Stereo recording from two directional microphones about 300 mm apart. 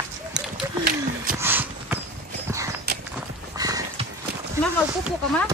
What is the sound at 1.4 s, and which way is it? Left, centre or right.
Clip-clop, centre.